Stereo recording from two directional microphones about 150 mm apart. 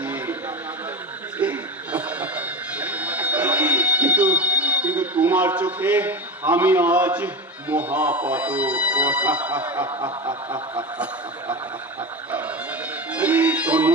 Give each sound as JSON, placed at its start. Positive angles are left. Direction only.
{"t": 0.0, "sound": "a sound", "side_deg": -10}
{"t": 1.4, "sound": "music", "side_deg": -10}
{"t": 7.7, "sound": "speech", "side_deg": -10}
{"t": 9.8, "sound": "snicker", "side_deg": -30}
{"t": 13.1, "sound": "music", "side_deg": -10}